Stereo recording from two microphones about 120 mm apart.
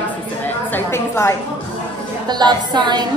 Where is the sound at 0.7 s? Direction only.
20° left (ahead or behind).